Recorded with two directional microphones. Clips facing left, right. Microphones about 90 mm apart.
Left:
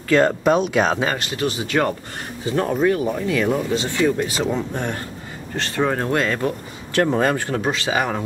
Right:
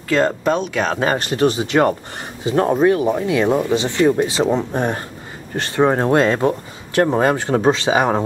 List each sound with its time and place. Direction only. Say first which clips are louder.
0.4 s speech: left 2 dB; 10° left (ahead or behind)
1.1 s speech: right 7 dB; 35° right (ahead or behind)